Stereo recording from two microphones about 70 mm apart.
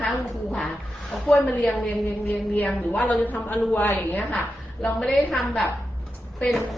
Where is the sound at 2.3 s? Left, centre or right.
Left.